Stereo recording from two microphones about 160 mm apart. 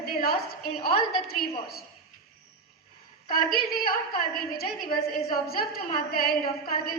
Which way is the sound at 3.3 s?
70° left (ahead or behind).